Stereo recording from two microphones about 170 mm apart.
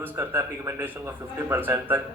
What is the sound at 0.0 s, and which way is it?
A man's voice, 15° right (ahead or behind).